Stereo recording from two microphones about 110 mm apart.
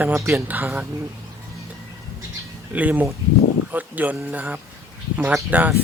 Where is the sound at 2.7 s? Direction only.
15° right (ahead or behind).